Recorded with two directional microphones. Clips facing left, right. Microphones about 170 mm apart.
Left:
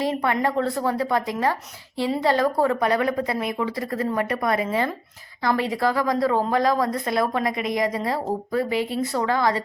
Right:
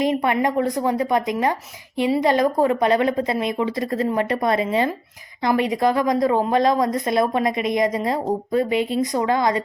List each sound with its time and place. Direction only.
0.0 s a woman's voice: 20° right (ahead or behind)